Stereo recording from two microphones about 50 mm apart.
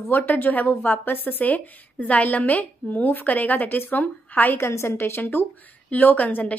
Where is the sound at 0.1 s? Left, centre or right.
Left.